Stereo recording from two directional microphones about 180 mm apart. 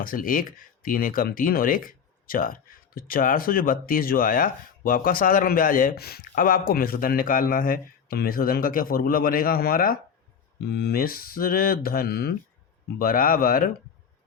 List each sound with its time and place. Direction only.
0.0 s speech: 50° left (ahead or behind)